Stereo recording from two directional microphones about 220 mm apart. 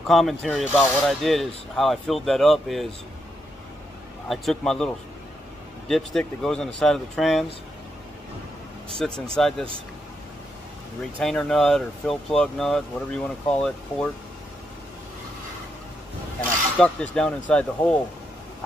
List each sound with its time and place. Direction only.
0.0 s speech: centre (ahead or behind)
4.3 s speech: centre (ahead or behind)
9.0 s speech: 5° left (ahead or behind)
11.1 s speech: 5° left (ahead or behind)
16.7 s speech: 5° left (ahead or behind)